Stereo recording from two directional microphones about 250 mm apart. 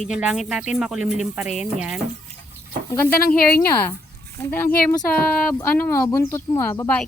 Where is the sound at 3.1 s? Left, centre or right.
Left.